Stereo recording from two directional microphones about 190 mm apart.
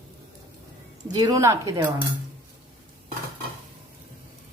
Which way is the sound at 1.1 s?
20° right (ahead or behind).